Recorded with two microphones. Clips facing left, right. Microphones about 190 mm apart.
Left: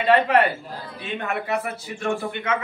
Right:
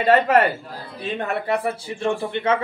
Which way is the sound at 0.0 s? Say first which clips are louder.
Right 2 dB; 40° right (ahead or behind).